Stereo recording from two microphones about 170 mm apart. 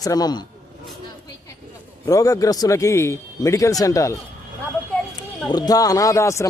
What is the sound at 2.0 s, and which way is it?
A man's voice, 20° left (ahead or behind).